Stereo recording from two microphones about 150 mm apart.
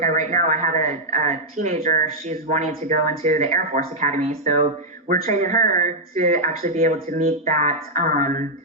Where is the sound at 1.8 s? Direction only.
60° right (ahead or behind).